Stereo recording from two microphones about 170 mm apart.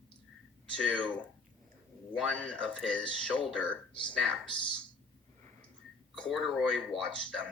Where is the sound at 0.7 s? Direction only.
5° left (ahead or behind).